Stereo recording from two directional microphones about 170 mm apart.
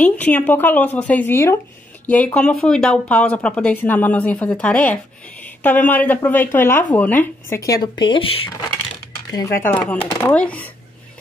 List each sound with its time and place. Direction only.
0.0 s speech: 10° left (ahead or behind)
9.7 s speech: 10° left (ahead or behind)